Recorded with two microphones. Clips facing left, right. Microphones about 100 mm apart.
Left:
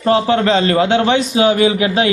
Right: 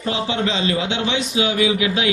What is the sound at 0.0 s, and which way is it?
A man's voice, 50° left (ahead or behind).